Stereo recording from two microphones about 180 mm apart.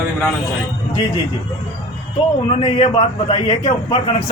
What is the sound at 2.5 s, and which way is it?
A man's voice, 30° left (ahead or behind).